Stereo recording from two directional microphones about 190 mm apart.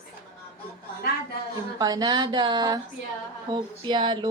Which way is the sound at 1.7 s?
20° right (ahead or behind).